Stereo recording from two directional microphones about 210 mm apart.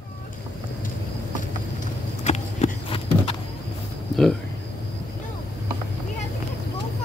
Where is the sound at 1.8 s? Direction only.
35° left (ahead or behind).